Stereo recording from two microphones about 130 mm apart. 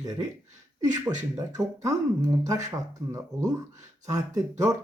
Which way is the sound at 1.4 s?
25° right (ahead or behind).